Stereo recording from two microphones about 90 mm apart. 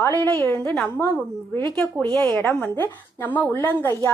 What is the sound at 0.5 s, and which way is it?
Speech, 15° left (ahead or behind).